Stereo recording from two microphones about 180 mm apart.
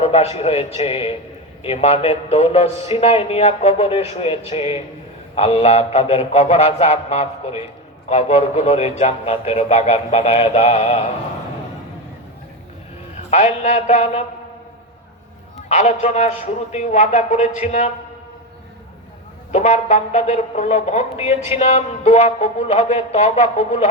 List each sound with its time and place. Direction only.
0.0 s speech: 35° left (ahead or behind)
13.3 s speech: 40° left (ahead or behind)
15.5 s speech: 40° left (ahead or behind)
19.5 s speech: 40° left (ahead or behind)